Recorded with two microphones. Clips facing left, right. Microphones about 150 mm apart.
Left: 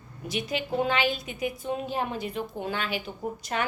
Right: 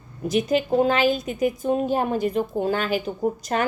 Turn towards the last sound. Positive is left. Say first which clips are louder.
# right 7 dB
turn(degrees=-40)  # may be behind; listen again after turning